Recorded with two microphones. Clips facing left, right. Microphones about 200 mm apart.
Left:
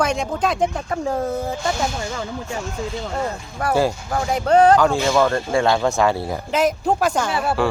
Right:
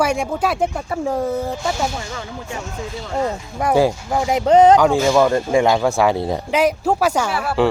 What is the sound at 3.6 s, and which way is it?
Speech, 15° right (ahead or behind).